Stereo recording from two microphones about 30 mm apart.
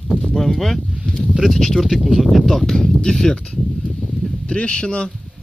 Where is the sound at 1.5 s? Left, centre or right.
Centre.